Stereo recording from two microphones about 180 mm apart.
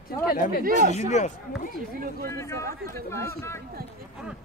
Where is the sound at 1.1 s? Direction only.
40° left (ahead or behind).